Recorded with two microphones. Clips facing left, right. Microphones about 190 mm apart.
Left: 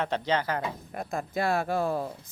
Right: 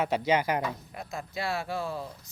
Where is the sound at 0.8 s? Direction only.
50° left (ahead or behind).